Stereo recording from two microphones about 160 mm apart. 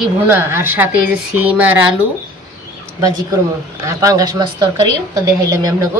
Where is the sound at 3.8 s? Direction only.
20° right (ahead or behind).